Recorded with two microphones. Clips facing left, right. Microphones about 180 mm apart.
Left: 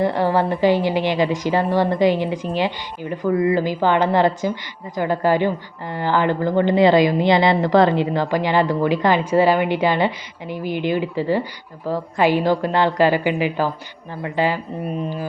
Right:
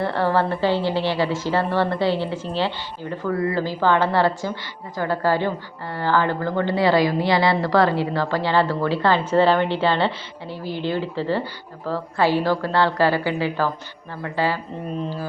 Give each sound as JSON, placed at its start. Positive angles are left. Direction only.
{"t": 0.0, "sound": "a woman's voice", "side_deg": 15}